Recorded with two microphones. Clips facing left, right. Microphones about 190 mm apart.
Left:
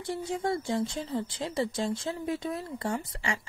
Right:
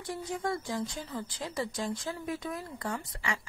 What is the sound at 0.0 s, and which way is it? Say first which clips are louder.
Speech: left 3 dB; 25° left (ahead or behind).